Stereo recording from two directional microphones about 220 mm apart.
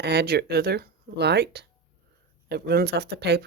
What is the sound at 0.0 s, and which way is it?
Speech, 50° right (ahead or behind).